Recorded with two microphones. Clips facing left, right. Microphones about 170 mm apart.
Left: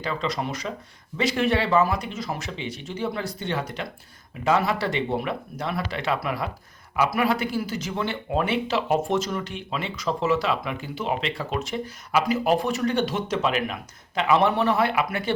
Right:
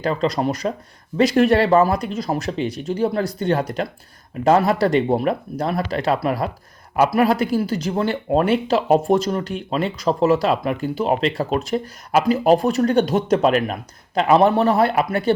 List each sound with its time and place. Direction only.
0.0 s speech: 40° right (ahead or behind)